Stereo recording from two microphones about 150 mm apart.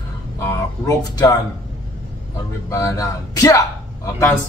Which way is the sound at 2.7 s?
20° left (ahead or behind).